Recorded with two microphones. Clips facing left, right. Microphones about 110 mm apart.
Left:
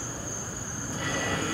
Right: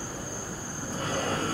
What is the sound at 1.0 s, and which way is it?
Train, 35° right (ahead or behind).